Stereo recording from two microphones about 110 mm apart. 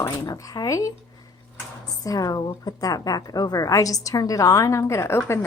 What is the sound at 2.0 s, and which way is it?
A woman's voice, 35° left (ahead or behind).